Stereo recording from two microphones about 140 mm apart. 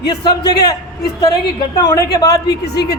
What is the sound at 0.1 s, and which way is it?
Speech, 25° left (ahead or behind).